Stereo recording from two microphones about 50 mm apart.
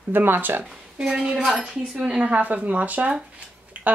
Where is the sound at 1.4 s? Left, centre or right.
Centre.